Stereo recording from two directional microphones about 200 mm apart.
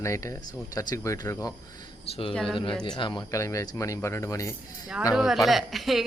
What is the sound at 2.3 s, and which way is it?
Speech, centre (ahead or behind).